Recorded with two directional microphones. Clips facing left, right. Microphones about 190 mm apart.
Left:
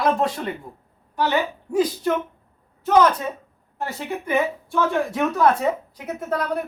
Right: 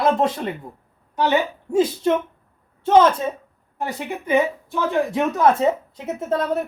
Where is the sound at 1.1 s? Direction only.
20° right (ahead or behind).